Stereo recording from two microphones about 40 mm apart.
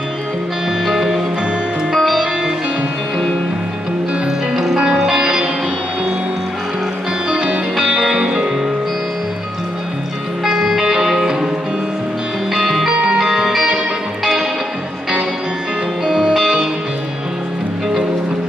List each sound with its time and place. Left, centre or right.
0.8 s music: centre
1.9 s music: centre
4.6 s music: centre
7.2 s music: right
7.7 s music: centre
10.4 s music: centre
12.9 s music: right
13.3 s music: centre
16.1 s music: centre